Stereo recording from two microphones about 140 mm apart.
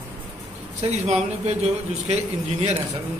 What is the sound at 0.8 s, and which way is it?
A man's voice, 50° right (ahead or behind).